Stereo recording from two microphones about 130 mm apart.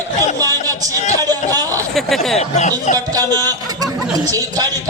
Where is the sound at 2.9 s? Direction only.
30° right (ahead or behind).